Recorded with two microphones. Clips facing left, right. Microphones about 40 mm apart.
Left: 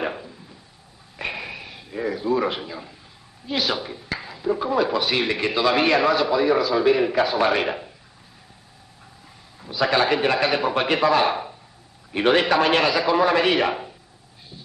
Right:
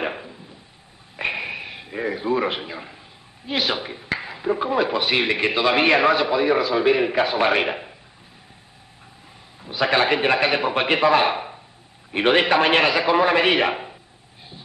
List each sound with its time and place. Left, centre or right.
0.0 s a sound: right
3.4 s speech: right
9.7 s speech: right